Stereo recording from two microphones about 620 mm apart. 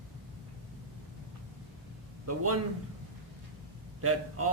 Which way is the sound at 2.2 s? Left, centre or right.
Right.